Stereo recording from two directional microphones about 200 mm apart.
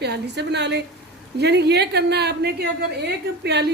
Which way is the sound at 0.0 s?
55° right (ahead or behind).